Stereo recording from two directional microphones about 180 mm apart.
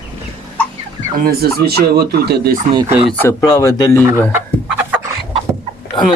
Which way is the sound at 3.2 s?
20° left (ahead or behind).